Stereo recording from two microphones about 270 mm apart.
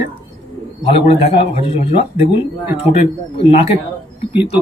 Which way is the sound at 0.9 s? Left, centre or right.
Centre.